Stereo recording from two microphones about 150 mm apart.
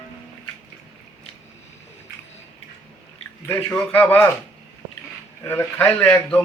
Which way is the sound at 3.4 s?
15° left (ahead or behind).